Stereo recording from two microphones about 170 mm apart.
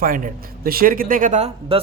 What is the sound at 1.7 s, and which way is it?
Speech, 35° right (ahead or behind).